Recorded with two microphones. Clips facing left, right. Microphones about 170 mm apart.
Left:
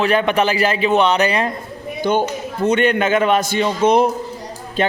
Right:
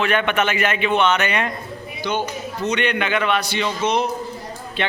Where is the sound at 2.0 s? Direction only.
50° left (ahead or behind).